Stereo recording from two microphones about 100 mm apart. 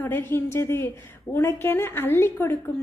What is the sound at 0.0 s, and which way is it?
A woman's voice, 20° left (ahead or behind).